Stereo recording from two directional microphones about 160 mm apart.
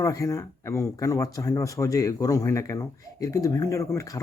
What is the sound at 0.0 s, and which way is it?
Speech, 20° left (ahead or behind).